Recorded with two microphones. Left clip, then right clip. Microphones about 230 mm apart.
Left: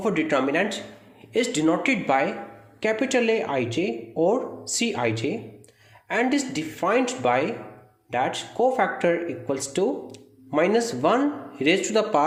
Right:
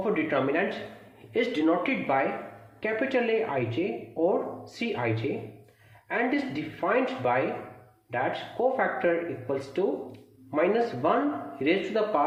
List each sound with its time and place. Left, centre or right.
0.0 s speech: left